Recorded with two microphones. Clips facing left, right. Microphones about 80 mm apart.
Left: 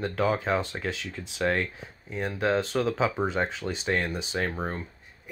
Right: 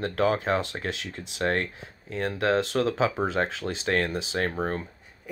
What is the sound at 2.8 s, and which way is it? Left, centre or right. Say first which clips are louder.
Speech: right 1 dB; right.